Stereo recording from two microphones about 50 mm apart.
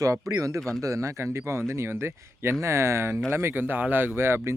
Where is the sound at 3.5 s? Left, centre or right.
Right.